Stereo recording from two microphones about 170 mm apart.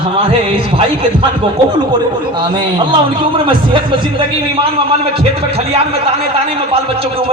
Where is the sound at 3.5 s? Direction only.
30° right (ahead or behind).